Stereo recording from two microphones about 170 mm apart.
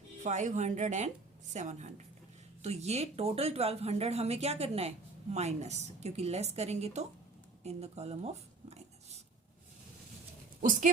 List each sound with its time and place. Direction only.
0.2 s speech: 45° right (ahead or behind)
7.6 s a sound: 40° right (ahead or behind)
10.6 s speech: 50° right (ahead or behind)